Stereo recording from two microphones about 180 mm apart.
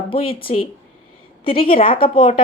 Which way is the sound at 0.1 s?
30° left (ahead or behind).